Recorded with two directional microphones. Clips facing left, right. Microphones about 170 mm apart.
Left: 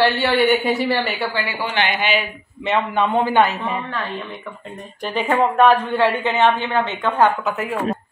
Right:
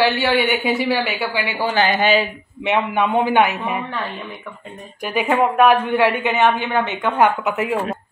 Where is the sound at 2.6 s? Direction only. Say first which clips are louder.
Right 1 dB; 15° right (ahead or behind).